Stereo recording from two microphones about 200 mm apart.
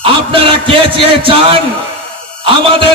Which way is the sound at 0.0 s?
25° right (ahead or behind).